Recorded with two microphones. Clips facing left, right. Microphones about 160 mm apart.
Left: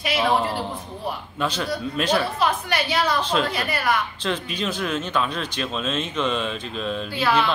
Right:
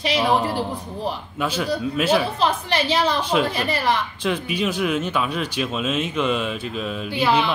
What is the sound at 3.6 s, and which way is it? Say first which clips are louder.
Speech: right 2 dB; 30° right (ahead or behind).